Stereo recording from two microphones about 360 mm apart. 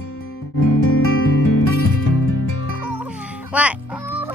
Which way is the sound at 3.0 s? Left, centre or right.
Centre.